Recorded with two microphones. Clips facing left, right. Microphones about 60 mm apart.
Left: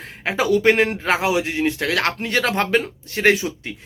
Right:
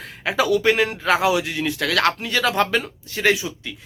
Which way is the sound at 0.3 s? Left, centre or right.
Left.